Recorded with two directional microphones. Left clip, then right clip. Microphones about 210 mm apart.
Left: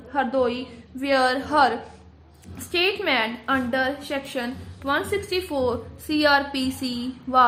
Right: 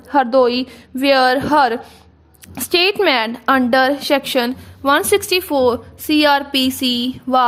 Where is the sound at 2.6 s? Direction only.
50° right (ahead or behind).